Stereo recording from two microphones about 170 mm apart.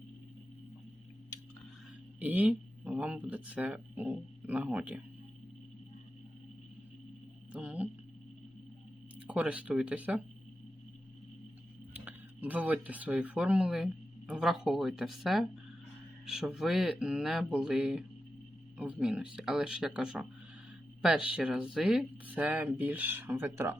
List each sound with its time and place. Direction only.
2.1 s speech: 10° right (ahead or behind)
7.5 s a sound: 10° right (ahead or behind)
9.1 s speech: 5° right (ahead or behind)
12.0 s speech: 10° right (ahead or behind)